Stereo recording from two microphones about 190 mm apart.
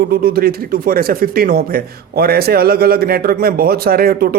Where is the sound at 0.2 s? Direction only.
50° right (ahead or behind).